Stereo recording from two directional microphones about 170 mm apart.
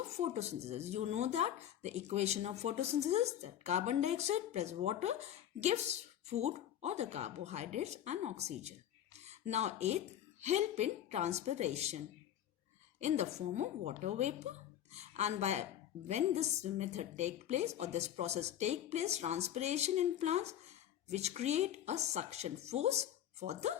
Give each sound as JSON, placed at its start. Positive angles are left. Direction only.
{"t": 0.2, "sound": "speech", "side_deg": -40}
{"t": 13.0, "sound": "speech", "side_deg": -40}